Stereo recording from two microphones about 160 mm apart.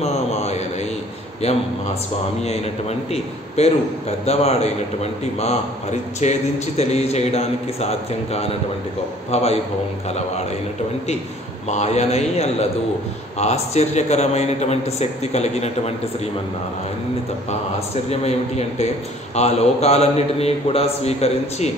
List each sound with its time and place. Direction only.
0.0 s mantra: 45° left (ahead or behind)
1.4 s a man's voice: 40° left (ahead or behind)
11.7 s a man's voice: 45° left (ahead or behind)
17.5 s a man's voice: 40° left (ahead or behind)